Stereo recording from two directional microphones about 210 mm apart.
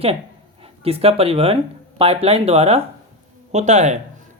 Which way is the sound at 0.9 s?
30° right (ahead or behind).